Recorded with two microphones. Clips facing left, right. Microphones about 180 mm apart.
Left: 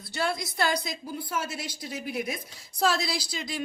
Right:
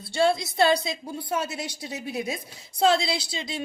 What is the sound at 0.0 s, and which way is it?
A woman's voice, 25° right (ahead or behind).